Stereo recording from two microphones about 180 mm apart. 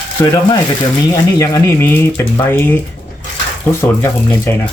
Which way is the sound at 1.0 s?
20° left (ahead or behind).